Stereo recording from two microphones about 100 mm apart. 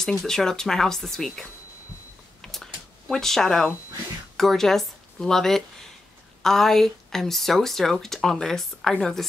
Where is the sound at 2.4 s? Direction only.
5° left (ahead or behind).